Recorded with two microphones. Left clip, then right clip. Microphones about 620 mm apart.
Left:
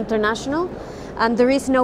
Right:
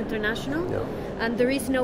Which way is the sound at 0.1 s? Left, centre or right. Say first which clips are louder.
Left 9 dB; left.